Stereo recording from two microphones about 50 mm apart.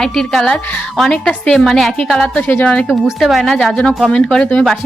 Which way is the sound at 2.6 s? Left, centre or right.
Left.